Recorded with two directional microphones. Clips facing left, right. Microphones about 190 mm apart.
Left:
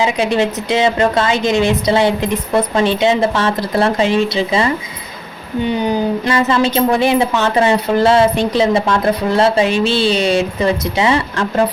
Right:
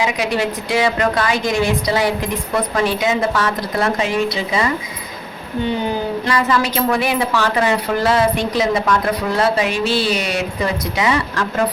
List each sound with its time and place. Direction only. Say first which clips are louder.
0.0 s speech: left 4 dB; 25° left (ahead or behind)
6.2 s speech: left 2 dB; 25° left (ahead or behind)